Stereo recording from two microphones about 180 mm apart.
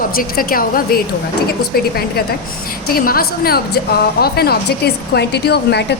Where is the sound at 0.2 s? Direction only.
55° left (ahead or behind).